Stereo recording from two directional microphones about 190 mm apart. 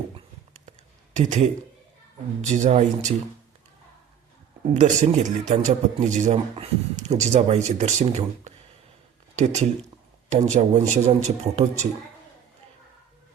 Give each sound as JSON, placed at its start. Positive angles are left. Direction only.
{"t": 1.1, "sound": "a man's voice", "side_deg": -40}
{"t": 4.7, "sound": "a man's voice", "side_deg": -35}